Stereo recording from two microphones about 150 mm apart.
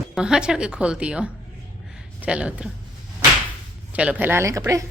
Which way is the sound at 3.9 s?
10° right (ahead or behind).